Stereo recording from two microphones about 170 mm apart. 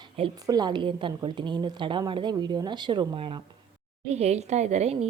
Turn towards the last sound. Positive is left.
turn(degrees=-40)  # may be behind; listen again after turning